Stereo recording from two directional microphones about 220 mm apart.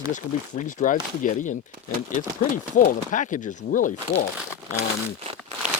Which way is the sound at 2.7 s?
35° left (ahead or behind).